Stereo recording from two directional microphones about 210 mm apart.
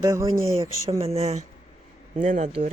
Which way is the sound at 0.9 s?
30° right (ahead or behind).